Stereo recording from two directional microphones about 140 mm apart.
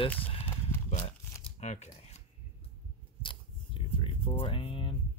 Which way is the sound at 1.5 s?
55° left (ahead or behind).